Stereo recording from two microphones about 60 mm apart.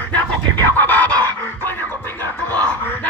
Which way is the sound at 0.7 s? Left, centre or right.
Left.